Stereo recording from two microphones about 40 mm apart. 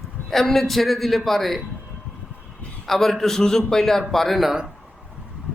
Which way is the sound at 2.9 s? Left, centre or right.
Centre.